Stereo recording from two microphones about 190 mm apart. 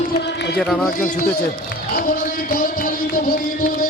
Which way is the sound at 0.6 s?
Centre (ahead or behind).